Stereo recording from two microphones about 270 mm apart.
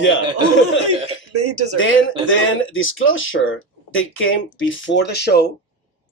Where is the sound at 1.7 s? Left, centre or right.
Left.